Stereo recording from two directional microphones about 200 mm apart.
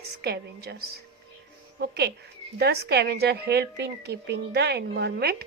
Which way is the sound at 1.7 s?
55° right (ahead or behind).